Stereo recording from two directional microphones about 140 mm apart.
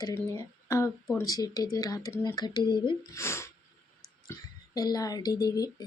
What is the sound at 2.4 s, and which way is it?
Speech, 30° left (ahead or behind).